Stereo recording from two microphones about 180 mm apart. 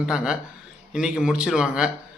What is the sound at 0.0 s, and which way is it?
A man's voice, 5° right (ahead or behind).